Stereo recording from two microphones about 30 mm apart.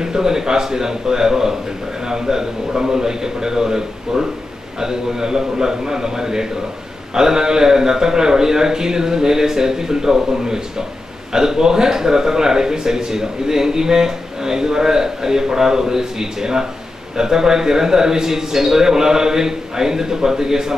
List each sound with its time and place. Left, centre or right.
0.0 s speech: right